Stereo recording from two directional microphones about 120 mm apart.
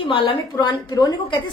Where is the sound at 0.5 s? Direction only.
35° left (ahead or behind).